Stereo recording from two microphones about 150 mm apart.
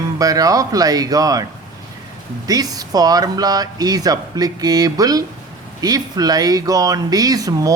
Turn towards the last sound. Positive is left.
turn(degrees=-25)  # may be behind; listen again after turning